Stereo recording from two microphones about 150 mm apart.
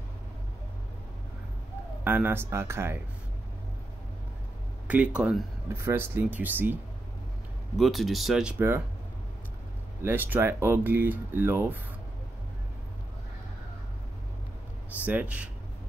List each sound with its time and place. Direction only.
2.0 s speech: 15° right (ahead or behind)
4.8 s speech: 10° right (ahead or behind)
7.7 s speech: centre (ahead or behind)
10.0 s speech: 10° right (ahead or behind)
15.0 s speech: 10° right (ahead or behind)